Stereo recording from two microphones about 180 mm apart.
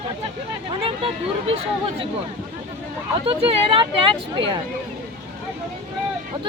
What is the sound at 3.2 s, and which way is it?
Speech, 30° right (ahead or behind).